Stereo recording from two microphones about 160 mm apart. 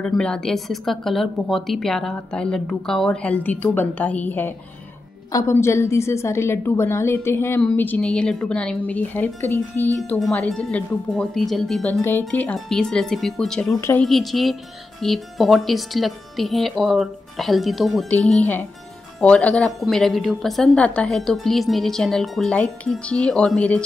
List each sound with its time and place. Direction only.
0.0 s speech: 5° left (ahead or behind)
13.7 s speech: 15° left (ahead or behind)
14.0 s speech: centre (ahead or behind)